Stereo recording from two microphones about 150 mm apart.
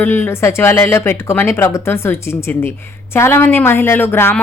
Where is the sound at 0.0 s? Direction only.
15° left (ahead or behind).